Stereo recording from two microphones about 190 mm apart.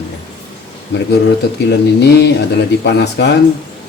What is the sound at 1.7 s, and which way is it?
A man's voice, 65° left (ahead or behind).